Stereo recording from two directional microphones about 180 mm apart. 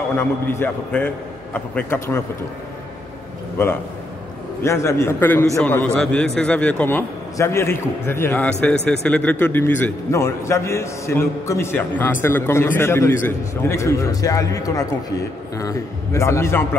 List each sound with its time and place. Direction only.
0.2 s a man's voice: 15° left (ahead or behind)
3.6 s a man's voice: 15° left (ahead or behind)